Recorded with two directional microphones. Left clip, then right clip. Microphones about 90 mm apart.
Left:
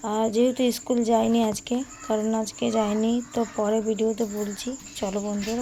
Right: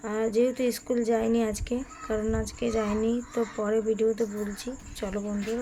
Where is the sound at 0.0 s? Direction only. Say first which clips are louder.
Left 3 dB; 30° left (ahead or behind).